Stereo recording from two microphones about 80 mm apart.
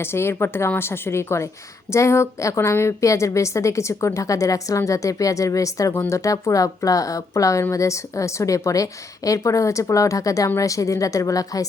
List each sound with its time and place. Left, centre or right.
0.0 s a woman's voice: left